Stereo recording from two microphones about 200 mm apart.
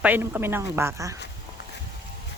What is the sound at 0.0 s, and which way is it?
A woman's voice, 10° right (ahead or behind).